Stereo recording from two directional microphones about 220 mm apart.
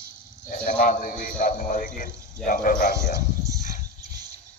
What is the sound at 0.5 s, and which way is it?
A man's voice, 40° left (ahead or behind).